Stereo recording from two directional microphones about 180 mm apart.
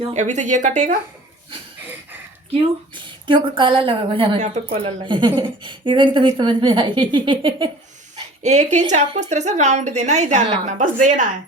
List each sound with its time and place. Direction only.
0.0 s speech: 40° right (ahead or behind)
3.2 s a woman's voice: 25° right (ahead or behind)
4.4 s a woman's voice: 40° right (ahead or behind)
8.4 s a woman's voice: 40° right (ahead or behind)